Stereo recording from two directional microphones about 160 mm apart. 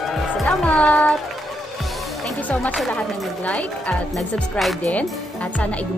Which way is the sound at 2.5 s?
Centre (ahead or behind).